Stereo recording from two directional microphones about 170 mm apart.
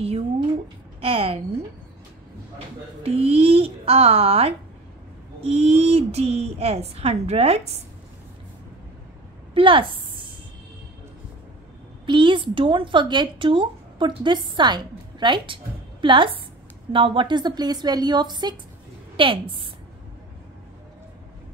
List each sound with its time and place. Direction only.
1.0 s a woman's voice: 35° right (ahead or behind)
3.0 s a woman's voice: 35° right (ahead or behind)
9.5 s a sound: 30° right (ahead or behind)
12.1 s a woman's voice: 30° right (ahead or behind)